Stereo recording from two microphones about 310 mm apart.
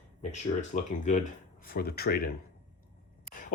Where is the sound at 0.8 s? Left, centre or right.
Left.